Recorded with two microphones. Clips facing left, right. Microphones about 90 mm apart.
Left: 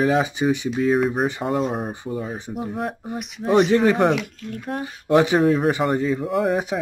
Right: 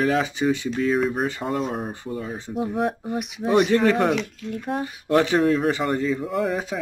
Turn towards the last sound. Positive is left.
turn(degrees=0)  # may be behind; listen again after turning